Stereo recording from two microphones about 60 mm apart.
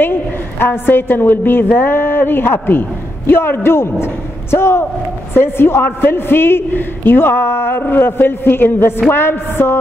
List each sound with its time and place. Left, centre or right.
0.0 s a man's voice: left